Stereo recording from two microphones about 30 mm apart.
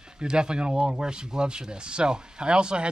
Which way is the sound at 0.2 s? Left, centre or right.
Right.